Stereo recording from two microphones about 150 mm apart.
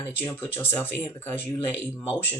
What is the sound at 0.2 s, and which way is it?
Speech, 15° left (ahead or behind).